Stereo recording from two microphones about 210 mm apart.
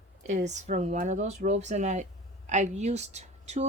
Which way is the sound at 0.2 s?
35° right (ahead or behind).